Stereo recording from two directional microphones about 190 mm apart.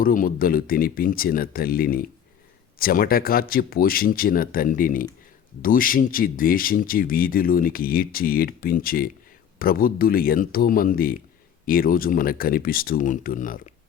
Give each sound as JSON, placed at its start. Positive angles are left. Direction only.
{"t": 0.0, "sound": "speech", "side_deg": 45}